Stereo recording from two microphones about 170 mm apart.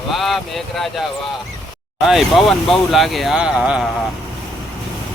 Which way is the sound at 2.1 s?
Centre (ahead or behind).